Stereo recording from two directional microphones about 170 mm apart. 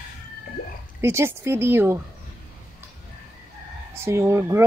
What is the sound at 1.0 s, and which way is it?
Speech, 15° right (ahead or behind).